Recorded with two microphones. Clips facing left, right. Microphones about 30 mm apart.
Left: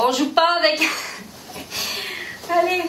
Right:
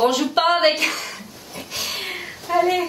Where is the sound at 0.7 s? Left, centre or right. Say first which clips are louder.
Left 1 dB; left.